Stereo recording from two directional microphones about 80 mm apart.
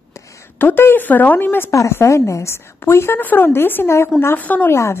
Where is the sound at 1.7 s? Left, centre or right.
Left.